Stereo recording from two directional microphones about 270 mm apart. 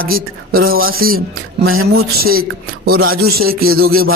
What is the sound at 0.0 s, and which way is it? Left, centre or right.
Speech, right.